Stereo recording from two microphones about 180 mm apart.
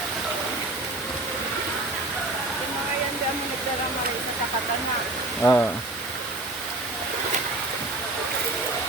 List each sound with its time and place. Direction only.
5.4 s speech: 10° left (ahead or behind)